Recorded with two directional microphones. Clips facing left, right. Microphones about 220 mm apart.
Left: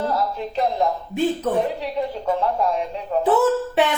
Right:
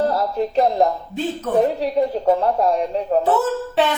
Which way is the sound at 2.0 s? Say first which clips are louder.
Right 6 dB; 40° right (ahead or behind).